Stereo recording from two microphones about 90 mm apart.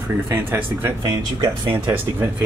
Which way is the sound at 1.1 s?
45° right (ahead or behind).